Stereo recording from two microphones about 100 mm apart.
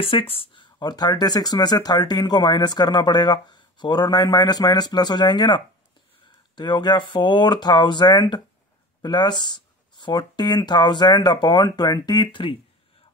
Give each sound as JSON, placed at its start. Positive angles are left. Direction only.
{"t": 0.0, "sound": "speech", "side_deg": 65}